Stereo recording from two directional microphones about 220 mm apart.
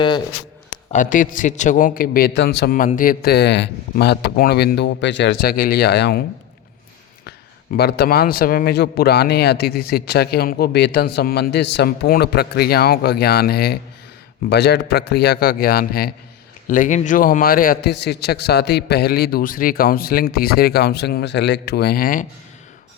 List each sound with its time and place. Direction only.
0.9 s speech: 35° left (ahead or behind)
7.3 s speech: 45° left (ahead or behind)